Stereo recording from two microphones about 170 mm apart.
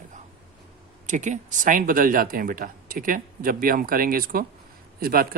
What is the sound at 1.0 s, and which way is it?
Speech, 45° right (ahead or behind).